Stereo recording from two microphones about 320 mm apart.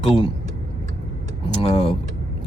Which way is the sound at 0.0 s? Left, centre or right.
Centre.